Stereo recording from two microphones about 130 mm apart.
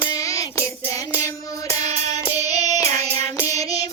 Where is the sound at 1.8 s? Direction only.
55° right (ahead or behind).